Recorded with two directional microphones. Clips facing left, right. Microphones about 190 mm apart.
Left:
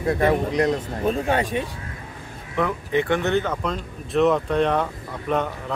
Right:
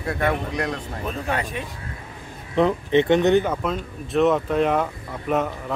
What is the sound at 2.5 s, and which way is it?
Speech, 25° right (ahead or behind).